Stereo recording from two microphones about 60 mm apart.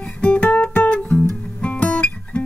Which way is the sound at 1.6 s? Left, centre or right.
Centre.